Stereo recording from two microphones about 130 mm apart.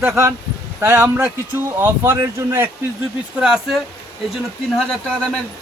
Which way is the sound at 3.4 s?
5° right (ahead or behind).